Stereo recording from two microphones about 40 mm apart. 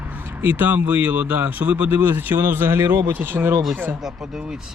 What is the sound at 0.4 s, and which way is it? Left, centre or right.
Speech, right.